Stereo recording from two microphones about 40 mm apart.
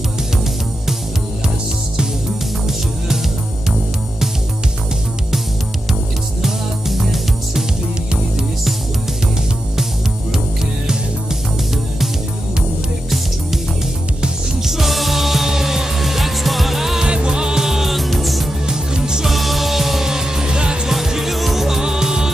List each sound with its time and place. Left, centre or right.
6.4 s music: centre
14.6 s music: centre
17.0 s music: right; by 18.5 s centre
18.7 s music: centre
19.2 s music: centre; by 20.9 s right
20.9 s music: centre